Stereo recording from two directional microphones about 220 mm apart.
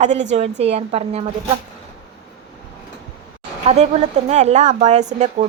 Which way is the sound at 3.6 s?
30° right (ahead or behind).